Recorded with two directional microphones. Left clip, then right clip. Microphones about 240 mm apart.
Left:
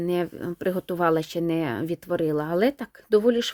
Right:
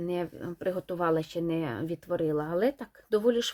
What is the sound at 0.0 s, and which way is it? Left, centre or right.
Speech, left.